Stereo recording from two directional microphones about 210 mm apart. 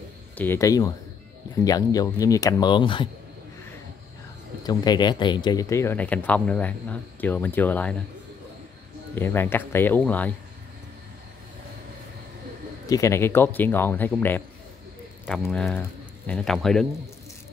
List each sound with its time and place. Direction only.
0.4 s speech: 15° left (ahead or behind)
4.6 s speech: 20° left (ahead or behind)
9.1 s speech: 10° left (ahead or behind)
12.8 s speech: 15° left (ahead or behind)